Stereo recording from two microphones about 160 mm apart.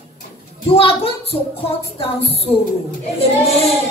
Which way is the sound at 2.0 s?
35° left (ahead or behind).